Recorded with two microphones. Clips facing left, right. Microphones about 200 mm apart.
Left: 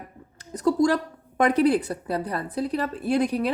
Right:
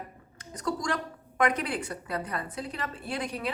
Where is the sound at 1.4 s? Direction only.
35° left (ahead or behind).